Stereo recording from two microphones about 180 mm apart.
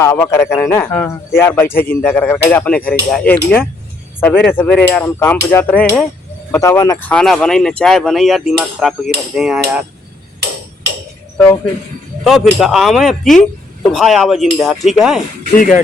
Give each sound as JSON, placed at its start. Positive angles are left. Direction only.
{"t": 0.0, "sound": "speech", "side_deg": 15}
{"t": 7.0, "sound": "cutlery", "side_deg": 5}
{"t": 11.3, "sound": "speech", "side_deg": 10}
{"t": 12.2, "sound": "cutlery", "side_deg": 0}